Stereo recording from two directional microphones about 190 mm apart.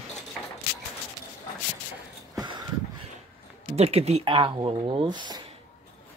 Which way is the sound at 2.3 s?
25° right (ahead or behind).